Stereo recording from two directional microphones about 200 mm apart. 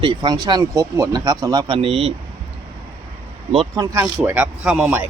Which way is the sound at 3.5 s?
25° right (ahead or behind).